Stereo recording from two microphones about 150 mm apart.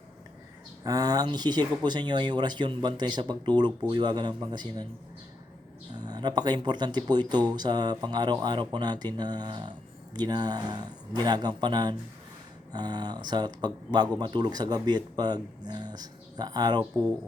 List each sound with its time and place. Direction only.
0.9 s speech: 25° right (ahead or behind)
6.1 s speech: 30° right (ahead or behind)